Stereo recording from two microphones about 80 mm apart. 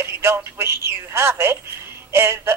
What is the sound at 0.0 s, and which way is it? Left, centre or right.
A man's voice, right.